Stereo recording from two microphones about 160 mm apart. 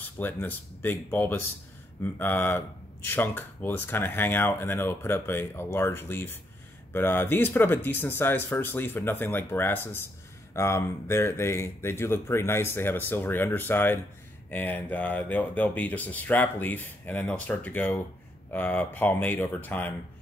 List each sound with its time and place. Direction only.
0.0 s speech: 10° left (ahead or behind)